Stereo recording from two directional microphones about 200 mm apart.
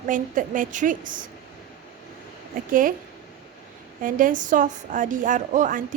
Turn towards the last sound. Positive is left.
turn(degrees=-40)  # may be behind; listen again after turning